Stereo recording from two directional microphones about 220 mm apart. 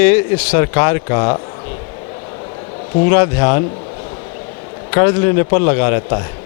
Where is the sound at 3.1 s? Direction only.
15° left (ahead or behind).